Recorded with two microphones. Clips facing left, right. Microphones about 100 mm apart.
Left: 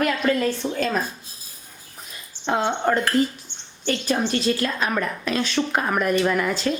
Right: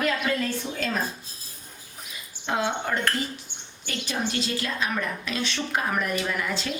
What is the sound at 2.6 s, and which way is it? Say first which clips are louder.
A woman's voice: left 5 dB; 50° left (ahead or behind).